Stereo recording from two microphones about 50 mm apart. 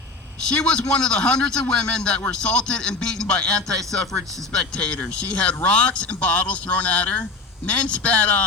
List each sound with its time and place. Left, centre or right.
0.5 s a man's voice: centre